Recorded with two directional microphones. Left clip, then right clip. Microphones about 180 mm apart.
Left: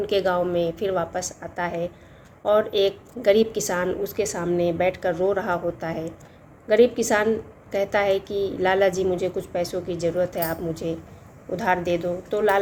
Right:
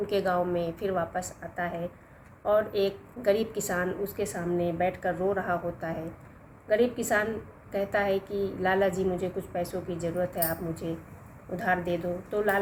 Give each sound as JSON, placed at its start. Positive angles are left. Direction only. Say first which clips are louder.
{"t": 0.1, "sound": "a woman's voice", "louder": "left 5 dB", "side_deg": 55}